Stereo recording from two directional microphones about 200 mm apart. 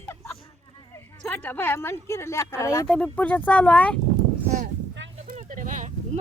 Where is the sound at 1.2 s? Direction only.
10° left (ahead or behind).